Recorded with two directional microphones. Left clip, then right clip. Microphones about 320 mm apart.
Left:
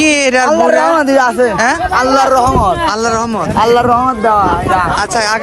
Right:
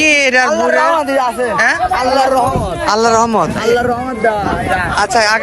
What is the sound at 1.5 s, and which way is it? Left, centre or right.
Speech, centre.